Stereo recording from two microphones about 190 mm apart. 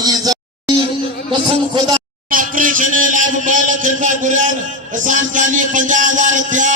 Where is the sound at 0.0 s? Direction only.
20° right (ahead or behind).